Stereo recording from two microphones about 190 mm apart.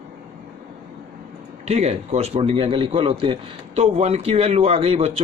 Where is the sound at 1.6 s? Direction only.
35° right (ahead or behind).